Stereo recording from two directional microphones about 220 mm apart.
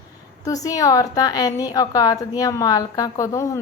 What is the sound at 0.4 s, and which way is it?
A woman's voice, 15° left (ahead or behind).